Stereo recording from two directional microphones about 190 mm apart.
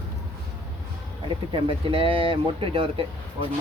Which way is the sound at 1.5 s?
30° right (ahead or behind).